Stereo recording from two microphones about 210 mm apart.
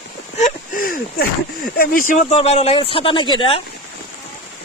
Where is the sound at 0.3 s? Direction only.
40° left (ahead or behind).